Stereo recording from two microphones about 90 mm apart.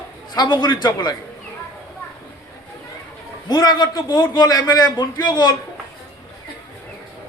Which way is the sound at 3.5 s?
50° left (ahead or behind).